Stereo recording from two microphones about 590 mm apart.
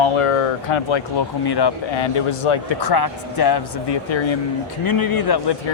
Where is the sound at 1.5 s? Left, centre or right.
Left.